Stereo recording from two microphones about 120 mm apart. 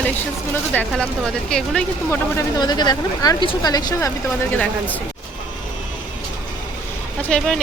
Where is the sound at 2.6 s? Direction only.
35° left (ahead or behind).